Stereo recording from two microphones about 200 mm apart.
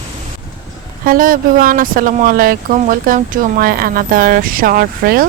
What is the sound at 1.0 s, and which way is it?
Speech, 45° right (ahead or behind).